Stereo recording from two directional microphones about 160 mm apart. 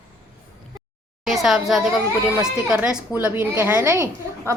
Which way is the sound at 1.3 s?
Centre (ahead or behind).